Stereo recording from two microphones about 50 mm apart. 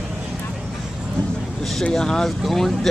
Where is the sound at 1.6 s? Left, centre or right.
Centre.